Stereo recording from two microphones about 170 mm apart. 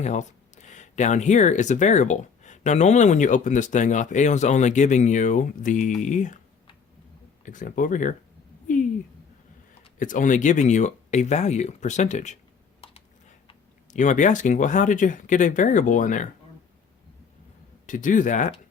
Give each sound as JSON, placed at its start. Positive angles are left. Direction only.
{"t": 0.0, "sound": "speech", "side_deg": 45}
{"t": 7.4, "sound": "speech", "side_deg": 50}
{"t": 10.0, "sound": "speech", "side_deg": 50}
{"t": 13.9, "sound": "speech", "side_deg": 45}
{"t": 17.8, "sound": "speech", "side_deg": 50}